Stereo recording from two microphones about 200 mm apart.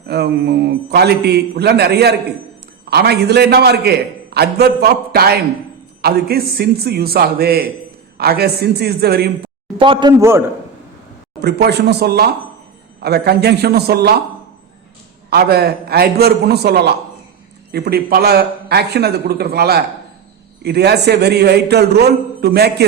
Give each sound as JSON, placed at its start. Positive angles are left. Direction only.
{"t": 0.1, "sound": "a man's voice", "side_deg": -55}
{"t": 9.7, "sound": "a man's voice", "side_deg": -25}
{"t": 11.3, "sound": "a man's voice", "side_deg": -55}
{"t": 15.3, "sound": "a man's voice", "side_deg": -50}